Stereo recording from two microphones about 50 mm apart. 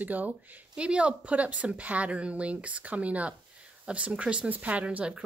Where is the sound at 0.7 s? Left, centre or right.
Right.